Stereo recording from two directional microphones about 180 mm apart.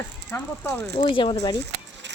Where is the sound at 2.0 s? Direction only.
80° right.